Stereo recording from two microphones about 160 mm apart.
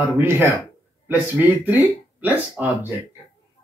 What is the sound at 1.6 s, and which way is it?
Speech, 10° right (ahead or behind).